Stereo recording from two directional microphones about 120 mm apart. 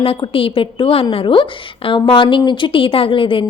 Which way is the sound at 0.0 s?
50° left (ahead or behind).